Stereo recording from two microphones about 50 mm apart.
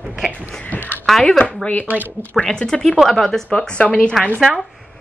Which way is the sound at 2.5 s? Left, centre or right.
Centre.